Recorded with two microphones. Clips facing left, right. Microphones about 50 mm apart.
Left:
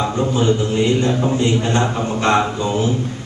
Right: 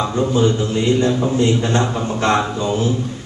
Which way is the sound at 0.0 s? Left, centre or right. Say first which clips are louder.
Right 1 dB; centre.